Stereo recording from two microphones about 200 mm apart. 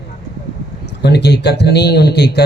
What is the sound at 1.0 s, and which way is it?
A man's voice, 55° left (ahead or behind).